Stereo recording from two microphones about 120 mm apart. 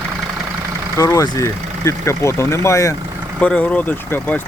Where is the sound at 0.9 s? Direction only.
30° left (ahead or behind).